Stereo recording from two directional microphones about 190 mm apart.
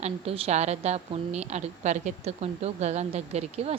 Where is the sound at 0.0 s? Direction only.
30° right (ahead or behind).